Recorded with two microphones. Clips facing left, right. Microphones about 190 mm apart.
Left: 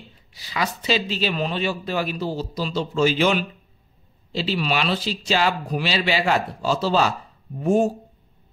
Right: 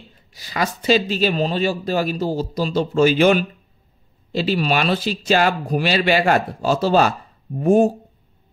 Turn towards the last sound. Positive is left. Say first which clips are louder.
# right 4 dB
turn(degrees=-55)  # may be behind; listen again after turning